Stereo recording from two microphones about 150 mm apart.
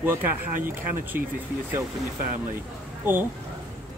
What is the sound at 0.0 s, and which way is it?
Speech, 15° right (ahead or behind).